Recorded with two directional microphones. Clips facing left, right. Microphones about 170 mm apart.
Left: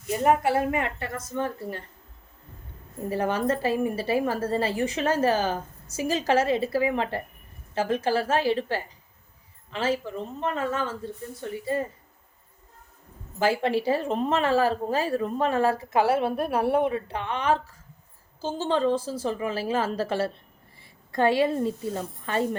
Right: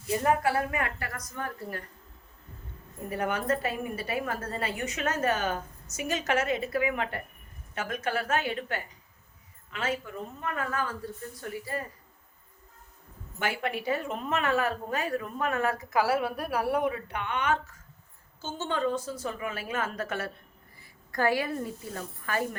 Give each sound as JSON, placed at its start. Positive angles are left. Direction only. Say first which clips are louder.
{"t": 0.1, "sound": "speech", "louder": "left 4 dB", "side_deg": 20}
{"t": 3.1, "sound": "speech", "louder": "left 4 dB", "side_deg": 30}
{"t": 13.4, "sound": "speech", "louder": "left 8 dB", "side_deg": 30}